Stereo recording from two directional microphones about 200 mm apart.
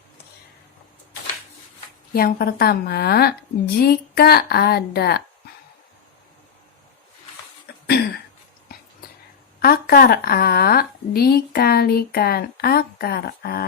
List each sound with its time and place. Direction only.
2.1 s a woman's voice: 50° left (ahead or behind)
7.7 s cough: 55° left (ahead or behind)
9.6 s a woman's voice: 50° left (ahead or behind)